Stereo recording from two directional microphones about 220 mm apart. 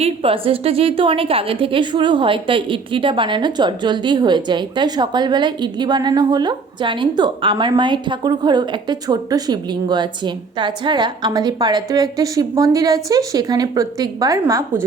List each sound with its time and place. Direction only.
0.0 s a woman's voice: 25° right (ahead or behind)